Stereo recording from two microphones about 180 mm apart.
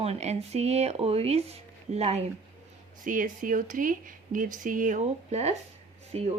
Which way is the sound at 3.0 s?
45° right (ahead or behind).